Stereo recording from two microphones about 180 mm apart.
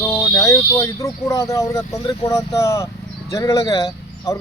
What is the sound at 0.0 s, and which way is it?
Speech, 15° left (ahead or behind).